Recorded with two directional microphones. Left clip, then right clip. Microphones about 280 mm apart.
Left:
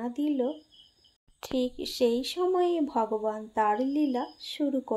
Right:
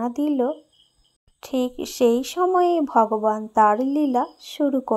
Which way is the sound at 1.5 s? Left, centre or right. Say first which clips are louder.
Right 5 dB; right.